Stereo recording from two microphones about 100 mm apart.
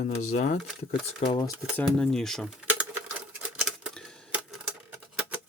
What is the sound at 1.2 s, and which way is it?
Speech, 55° left (ahead or behind).